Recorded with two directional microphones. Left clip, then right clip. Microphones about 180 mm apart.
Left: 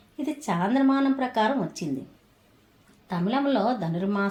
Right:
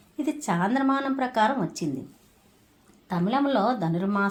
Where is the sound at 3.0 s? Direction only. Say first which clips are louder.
Right 1 dB; 30° right (ahead or behind).